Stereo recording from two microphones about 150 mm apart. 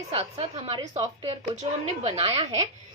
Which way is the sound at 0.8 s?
30° right (ahead or behind).